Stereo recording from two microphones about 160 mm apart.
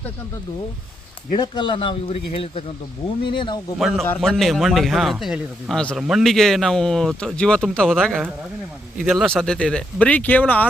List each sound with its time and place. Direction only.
1.4 s speech: 30° left (ahead or behind)
3.8 s speech: centre (ahead or behind)